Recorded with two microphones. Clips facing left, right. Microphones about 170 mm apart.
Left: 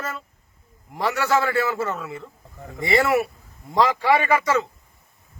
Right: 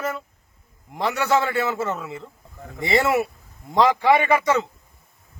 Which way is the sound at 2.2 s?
Centre (ahead or behind).